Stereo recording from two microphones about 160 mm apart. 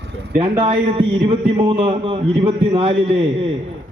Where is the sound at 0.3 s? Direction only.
35° right (ahead or behind).